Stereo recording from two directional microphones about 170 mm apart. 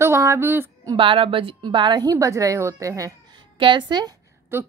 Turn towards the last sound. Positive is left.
turn(degrees=-15)  # may be behind; listen again after turning